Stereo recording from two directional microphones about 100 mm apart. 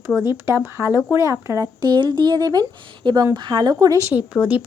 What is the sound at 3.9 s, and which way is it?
Speech, 25° right (ahead or behind).